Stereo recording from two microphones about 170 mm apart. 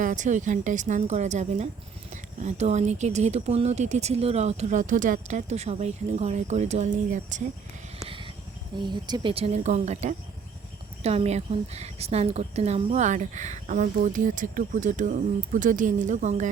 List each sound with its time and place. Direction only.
0.0 s speech: 50° right (ahead or behind)
8.8 s speech: 25° right (ahead or behind); by 16.5 s 45° right (ahead or behind)